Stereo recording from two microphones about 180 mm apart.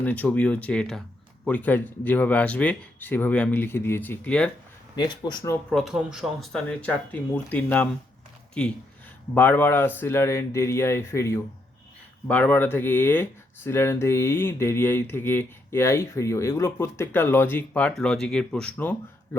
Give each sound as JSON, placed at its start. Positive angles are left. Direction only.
{"t": 0.0, "sound": "speech", "side_deg": 10}
{"t": 4.9, "sound": "speech", "side_deg": 25}
{"t": 5.7, "sound": "speech", "side_deg": 0}
{"t": 9.3, "sound": "speech", "side_deg": 10}